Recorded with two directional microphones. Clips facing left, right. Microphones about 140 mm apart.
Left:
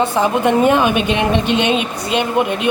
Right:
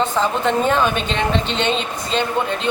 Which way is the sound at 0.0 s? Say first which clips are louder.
Left 4 dB; 10° left (ahead or behind).